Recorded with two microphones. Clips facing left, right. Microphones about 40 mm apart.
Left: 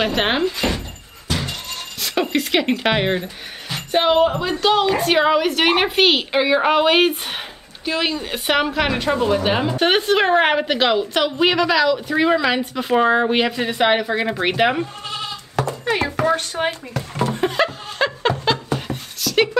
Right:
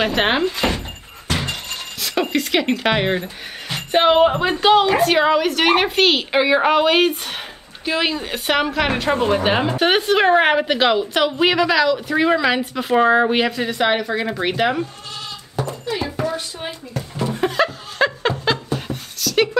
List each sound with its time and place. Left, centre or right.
0.0 s a woman's voice: centre
0.6 s thunk: centre
2.0 s speech: centre
3.6 s speech: centre
4.7 s a woman's voice: centre
7.8 s a woman's voice: centre
9.1 s speech: right
9.4 s a woman's voice: centre
9.8 s a woman's voice: centre
15.5 s a sound: left
17.3 s laughter: centre
18.9 s a sound: centre